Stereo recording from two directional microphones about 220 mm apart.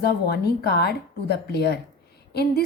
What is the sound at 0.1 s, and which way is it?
A woman's voice, 45° left (ahead or behind).